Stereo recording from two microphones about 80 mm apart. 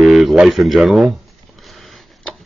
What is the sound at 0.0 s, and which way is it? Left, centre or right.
Speech, centre.